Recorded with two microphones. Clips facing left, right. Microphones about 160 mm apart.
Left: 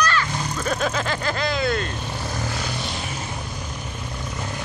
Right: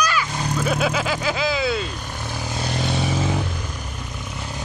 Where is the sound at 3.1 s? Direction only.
90° right.